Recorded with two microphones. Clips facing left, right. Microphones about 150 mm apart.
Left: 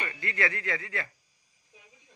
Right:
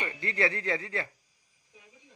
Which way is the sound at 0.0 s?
25° right (ahead or behind).